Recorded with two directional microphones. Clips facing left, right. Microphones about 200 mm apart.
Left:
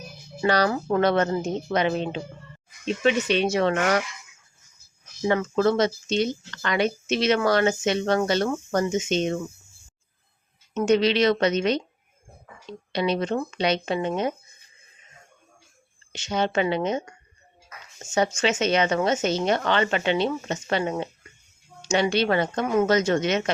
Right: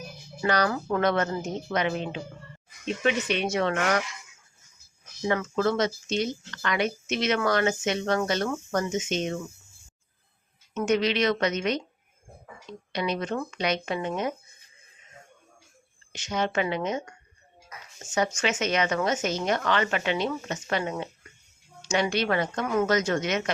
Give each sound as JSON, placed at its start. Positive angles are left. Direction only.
{"t": 0.4, "sound": "a woman's voice", "side_deg": 30}
{"t": 5.3, "sound": "speech", "side_deg": 30}
{"t": 10.8, "sound": "speech", "side_deg": 30}
{"t": 12.9, "sound": "a woman's voice", "side_deg": 30}
{"t": 16.1, "sound": "a woman's voice", "side_deg": 30}
{"t": 18.3, "sound": "a woman's voice", "side_deg": 30}